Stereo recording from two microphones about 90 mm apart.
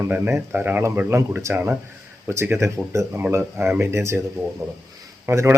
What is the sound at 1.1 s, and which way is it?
Speech, 30° right (ahead or behind).